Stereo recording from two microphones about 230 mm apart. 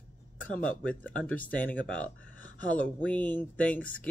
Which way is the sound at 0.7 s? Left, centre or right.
Centre.